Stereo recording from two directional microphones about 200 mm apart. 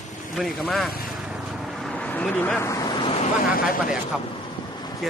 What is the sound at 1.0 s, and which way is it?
Vehicle, 5° right (ahead or behind).